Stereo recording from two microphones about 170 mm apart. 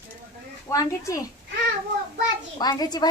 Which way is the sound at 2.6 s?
25° left (ahead or behind).